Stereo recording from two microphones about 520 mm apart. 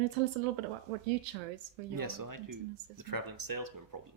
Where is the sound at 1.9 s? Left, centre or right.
Right.